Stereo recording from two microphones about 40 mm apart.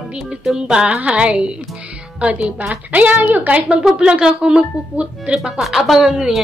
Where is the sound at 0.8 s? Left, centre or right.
Right.